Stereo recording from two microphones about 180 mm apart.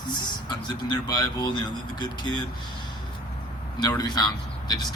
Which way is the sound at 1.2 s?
25° left (ahead or behind).